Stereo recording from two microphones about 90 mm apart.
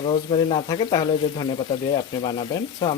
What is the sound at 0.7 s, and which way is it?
Speech, 55° left (ahead or behind).